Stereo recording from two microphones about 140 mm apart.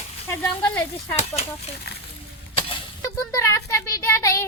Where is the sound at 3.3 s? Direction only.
20° left (ahead or behind).